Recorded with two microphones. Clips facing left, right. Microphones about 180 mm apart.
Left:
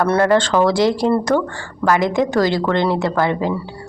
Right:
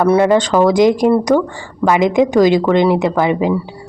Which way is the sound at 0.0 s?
15° right (ahead or behind).